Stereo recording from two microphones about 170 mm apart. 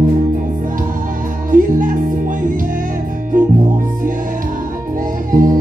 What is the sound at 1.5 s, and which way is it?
Music, 50° right (ahead or behind).